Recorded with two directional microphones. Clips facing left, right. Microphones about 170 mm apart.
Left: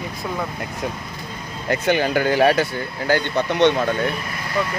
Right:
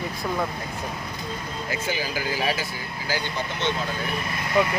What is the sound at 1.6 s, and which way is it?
Speech, 65° left (ahead or behind).